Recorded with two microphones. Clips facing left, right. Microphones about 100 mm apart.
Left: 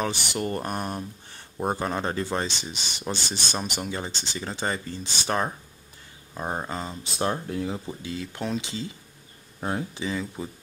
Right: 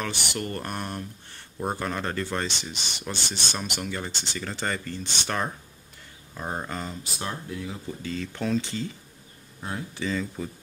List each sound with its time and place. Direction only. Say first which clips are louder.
0.0 s speech: left 3 dB; 20° left (ahead or behind)
7.2 s speech: left 8 dB; 40° left (ahead or behind)
7.8 s speech: right 1 dB; 15° left (ahead or behind)
9.6 s speech: left 5 dB; 40° left (ahead or behind)
9.9 s speech: right 1 dB; 15° left (ahead or behind)